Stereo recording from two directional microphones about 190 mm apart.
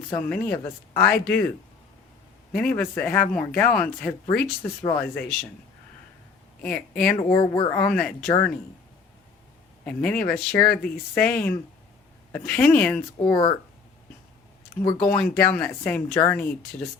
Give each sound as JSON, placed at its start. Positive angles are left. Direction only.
{"t": 0.3, "sound": "speech", "side_deg": 10}
{"t": 2.5, "sound": "speech", "side_deg": 5}
{"t": 6.6, "sound": "speech", "side_deg": 5}
{"t": 7.2, "sound": "speech", "side_deg": 25}
{"t": 7.7, "sound": "speech", "side_deg": 5}
{"t": 9.8, "sound": "speech", "side_deg": 5}
{"t": 13.2, "sound": "speech", "side_deg": 25}
{"t": 14.9, "sound": "speech", "side_deg": 5}